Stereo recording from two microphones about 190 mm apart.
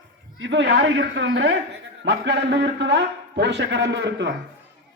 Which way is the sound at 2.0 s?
70° right (ahead or behind).